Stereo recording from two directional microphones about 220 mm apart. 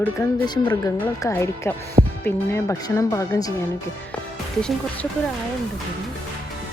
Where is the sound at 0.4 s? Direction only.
20° left (ahead or behind).